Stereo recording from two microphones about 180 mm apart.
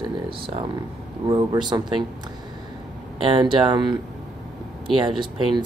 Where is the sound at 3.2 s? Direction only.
30° right (ahead or behind).